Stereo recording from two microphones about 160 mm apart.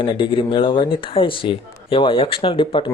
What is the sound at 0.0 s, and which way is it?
Speech, 30° left (ahead or behind).